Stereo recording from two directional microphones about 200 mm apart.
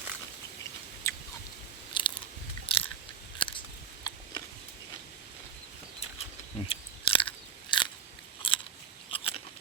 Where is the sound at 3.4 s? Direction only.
25° left (ahead or behind).